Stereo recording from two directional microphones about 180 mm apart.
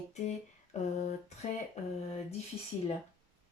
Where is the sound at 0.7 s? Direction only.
40° left (ahead or behind).